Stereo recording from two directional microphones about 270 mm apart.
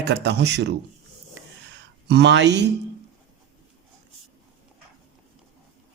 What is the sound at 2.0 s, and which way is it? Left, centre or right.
Speech, right.